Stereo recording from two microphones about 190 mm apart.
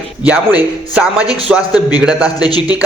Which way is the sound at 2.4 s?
20° left (ahead or behind).